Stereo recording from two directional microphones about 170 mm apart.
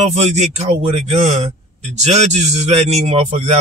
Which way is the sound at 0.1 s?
40° right (ahead or behind).